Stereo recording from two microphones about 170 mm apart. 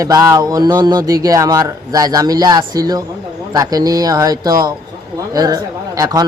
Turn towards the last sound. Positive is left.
turn(degrees=-20)  # may be behind; listen again after turning